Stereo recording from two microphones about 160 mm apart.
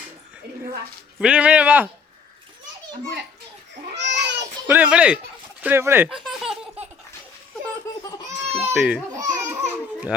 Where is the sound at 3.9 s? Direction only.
90° right.